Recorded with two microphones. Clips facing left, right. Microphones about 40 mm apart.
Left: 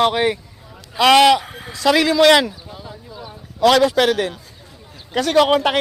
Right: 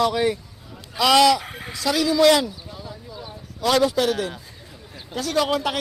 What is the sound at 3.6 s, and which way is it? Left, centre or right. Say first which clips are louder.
Speech: left 6 dB; left.